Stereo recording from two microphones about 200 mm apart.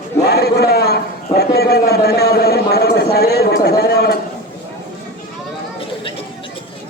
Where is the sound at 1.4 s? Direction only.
50° left (ahead or behind).